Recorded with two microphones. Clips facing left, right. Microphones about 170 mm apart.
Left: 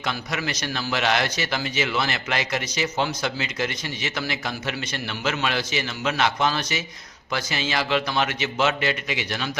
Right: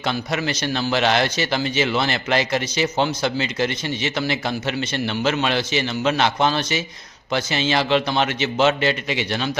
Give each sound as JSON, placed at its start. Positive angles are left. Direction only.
{"t": 0.0, "sound": "a man's voice", "side_deg": -30}